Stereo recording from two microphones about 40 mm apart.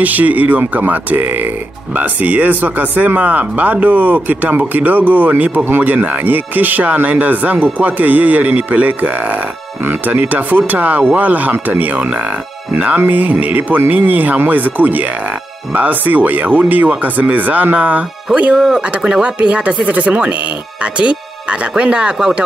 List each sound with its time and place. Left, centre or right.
0.0 s speech: right
2.0 s speech: right
11.5 s speech: right
11.8 s speech: right
18.6 s speech: right